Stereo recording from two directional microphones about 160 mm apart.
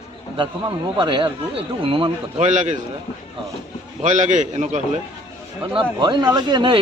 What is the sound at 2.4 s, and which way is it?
Speech, 50° right (ahead or behind).